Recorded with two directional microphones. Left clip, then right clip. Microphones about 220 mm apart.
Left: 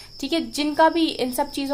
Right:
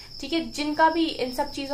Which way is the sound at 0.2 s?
50° left (ahead or behind).